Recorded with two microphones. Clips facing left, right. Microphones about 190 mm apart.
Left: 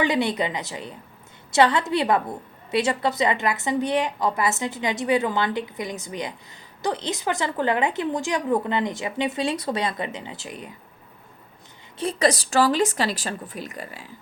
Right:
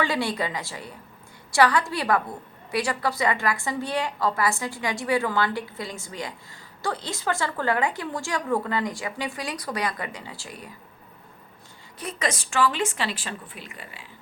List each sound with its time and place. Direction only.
0.0 s a woman's voice: 20° left (ahead or behind)
11.9 s speech: 30° left (ahead or behind)